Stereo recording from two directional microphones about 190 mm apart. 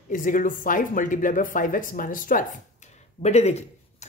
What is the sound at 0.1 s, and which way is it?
Speech, 45° left (ahead or behind).